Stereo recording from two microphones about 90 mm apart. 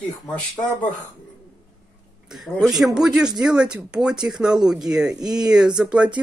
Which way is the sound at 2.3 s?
Centre (ahead or behind).